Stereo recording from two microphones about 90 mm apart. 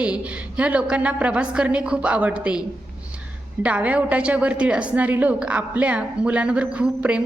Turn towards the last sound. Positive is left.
turn(degrees=-15)  # may be behind; listen again after turning